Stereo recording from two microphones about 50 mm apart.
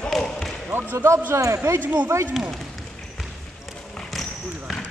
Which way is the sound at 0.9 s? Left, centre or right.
Right.